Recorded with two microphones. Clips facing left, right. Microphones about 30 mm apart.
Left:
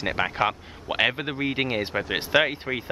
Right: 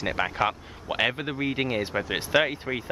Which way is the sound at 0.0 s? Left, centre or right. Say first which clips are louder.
Left 1 dB; centre.